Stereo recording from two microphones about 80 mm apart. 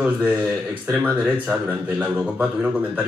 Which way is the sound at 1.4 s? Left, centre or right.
Centre.